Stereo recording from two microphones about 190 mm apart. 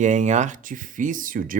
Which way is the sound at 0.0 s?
40° right (ahead or behind).